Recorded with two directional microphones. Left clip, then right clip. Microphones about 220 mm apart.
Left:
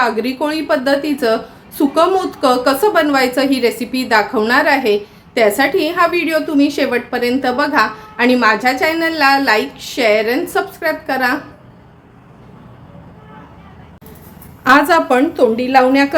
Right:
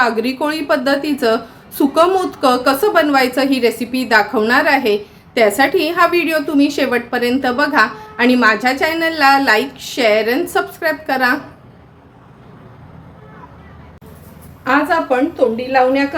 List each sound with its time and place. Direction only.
0.0 s a woman's voice: centre (ahead or behind)
14.6 s a woman's voice: 55° left (ahead or behind)